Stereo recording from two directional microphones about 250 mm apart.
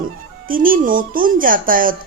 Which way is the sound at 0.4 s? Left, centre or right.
Right.